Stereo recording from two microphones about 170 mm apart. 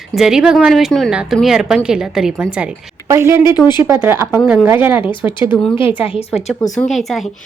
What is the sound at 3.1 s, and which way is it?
A woman's voice, 15° right (ahead or behind).